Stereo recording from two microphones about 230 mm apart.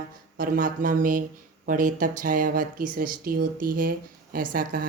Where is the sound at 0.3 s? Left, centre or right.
Right.